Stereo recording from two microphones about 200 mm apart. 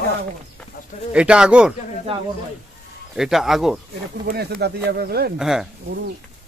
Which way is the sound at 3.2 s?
Centre (ahead or behind).